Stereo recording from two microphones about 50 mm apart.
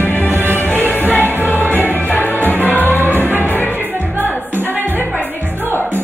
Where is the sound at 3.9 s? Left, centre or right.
Right.